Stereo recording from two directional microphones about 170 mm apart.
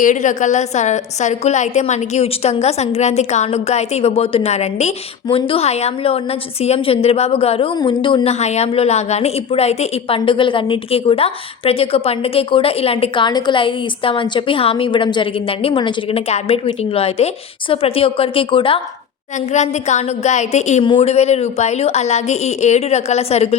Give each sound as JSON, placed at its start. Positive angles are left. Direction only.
{"t": 0.0, "sound": "a woman's voice", "side_deg": 45}
{"t": 19.5, "sound": "a woman's voice", "side_deg": 45}